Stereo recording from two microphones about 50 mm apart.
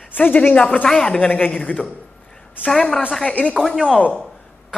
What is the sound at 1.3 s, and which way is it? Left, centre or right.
Speech, left.